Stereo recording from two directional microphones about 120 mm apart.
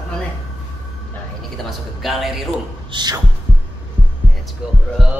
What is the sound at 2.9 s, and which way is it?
Speech, 35° right (ahead or behind).